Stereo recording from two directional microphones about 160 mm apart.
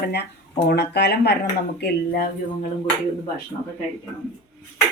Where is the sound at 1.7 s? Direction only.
65° left (ahead or behind).